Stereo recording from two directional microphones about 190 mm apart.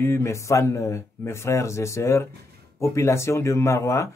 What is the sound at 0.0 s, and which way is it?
Speech, 15° left (ahead or behind).